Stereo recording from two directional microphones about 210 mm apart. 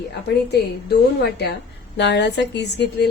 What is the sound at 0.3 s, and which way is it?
Speech, 50° left (ahead or behind).